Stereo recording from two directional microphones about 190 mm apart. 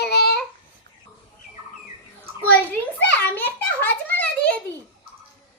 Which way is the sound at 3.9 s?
10° left (ahead or behind).